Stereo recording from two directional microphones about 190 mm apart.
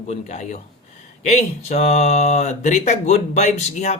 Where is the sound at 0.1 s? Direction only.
40° left (ahead or behind).